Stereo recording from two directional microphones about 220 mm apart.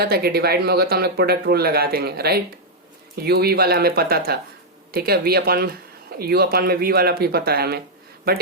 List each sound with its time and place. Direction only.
0.0 s speech: 45° right (ahead or behind)